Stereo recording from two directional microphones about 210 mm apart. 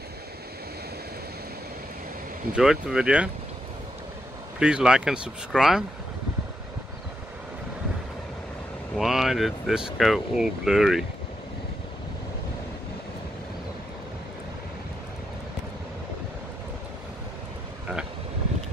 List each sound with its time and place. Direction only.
2.5 s speech: 5° right (ahead or behind)
4.6 s speech: 5° right (ahead or behind)
8.9 s speech: centre (ahead or behind)